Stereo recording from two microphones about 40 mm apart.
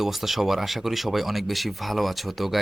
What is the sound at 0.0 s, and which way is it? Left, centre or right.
Speech, centre.